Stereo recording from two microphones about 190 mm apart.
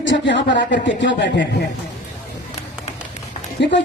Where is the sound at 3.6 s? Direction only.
65° left (ahead or behind).